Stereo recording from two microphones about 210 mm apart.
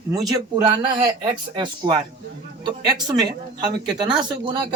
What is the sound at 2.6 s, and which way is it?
Speech, 20° right (ahead or behind).